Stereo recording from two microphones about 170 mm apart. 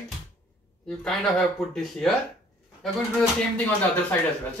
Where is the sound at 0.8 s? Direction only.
5° left (ahead or behind).